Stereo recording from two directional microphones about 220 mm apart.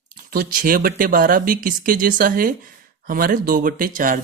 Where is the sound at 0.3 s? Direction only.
40° right (ahead or behind).